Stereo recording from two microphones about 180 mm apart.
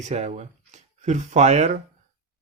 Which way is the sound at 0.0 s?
40° right (ahead or behind).